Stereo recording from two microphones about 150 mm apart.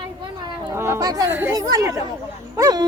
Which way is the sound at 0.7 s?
20° right (ahead or behind).